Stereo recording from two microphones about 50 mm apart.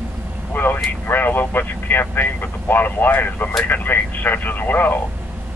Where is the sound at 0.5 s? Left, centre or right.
Left.